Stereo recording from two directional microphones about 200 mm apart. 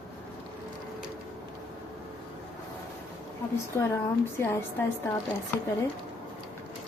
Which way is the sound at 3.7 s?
15° left (ahead or behind).